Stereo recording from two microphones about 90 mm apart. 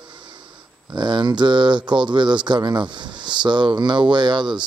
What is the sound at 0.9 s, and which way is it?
Mantra, 55° right (ahead or behind).